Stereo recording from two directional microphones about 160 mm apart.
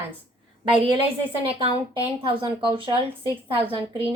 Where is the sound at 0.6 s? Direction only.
35° right (ahead or behind).